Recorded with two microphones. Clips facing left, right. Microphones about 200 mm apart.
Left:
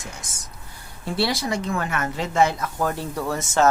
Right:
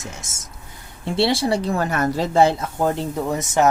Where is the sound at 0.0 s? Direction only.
25° right (ahead or behind).